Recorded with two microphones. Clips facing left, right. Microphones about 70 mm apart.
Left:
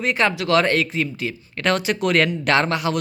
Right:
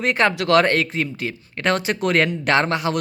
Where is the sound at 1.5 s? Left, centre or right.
Right.